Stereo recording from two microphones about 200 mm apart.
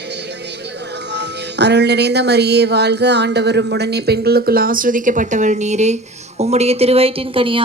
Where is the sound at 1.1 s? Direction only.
60° right (ahead or behind).